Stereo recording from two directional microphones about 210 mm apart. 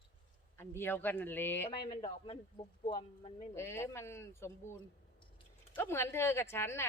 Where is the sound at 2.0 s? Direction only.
25° left (ahead or behind).